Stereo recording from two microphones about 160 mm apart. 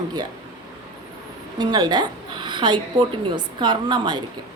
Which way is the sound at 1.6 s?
25° right (ahead or behind).